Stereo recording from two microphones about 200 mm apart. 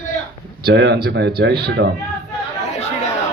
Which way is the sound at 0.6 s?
55° right (ahead or behind).